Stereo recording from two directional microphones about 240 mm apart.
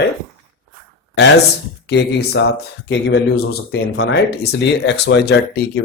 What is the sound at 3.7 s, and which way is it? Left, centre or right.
Speech, left.